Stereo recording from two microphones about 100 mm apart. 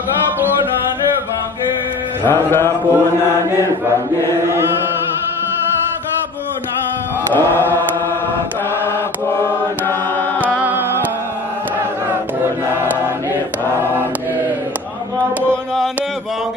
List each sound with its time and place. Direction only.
2.2 s music: 25° left (ahead or behind)
7.3 s music: 20° left (ahead or behind)
9.4 s chant: 20° left (ahead or behind)
10.4 s music: 20° right (ahead or behind)